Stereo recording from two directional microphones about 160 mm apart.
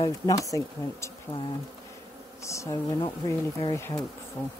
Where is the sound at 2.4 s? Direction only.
20° left (ahead or behind).